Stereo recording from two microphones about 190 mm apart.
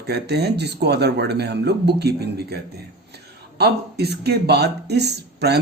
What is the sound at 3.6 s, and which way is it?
A man's voice, 60° right (ahead or behind).